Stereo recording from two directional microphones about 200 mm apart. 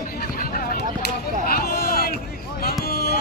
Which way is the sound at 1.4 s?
50° left (ahead or behind).